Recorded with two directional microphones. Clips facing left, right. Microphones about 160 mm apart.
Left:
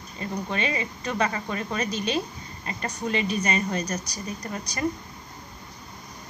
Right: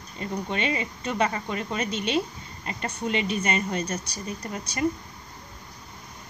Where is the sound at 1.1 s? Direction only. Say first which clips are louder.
Right 1 dB; 25° right (ahead or behind).